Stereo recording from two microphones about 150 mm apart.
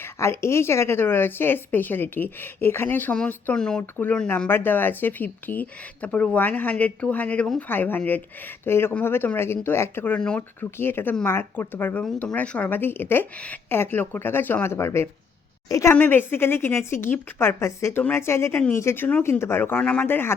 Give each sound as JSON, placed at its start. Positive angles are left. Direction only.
{"t": 0.0, "sound": "a woman's voice", "side_deg": 20}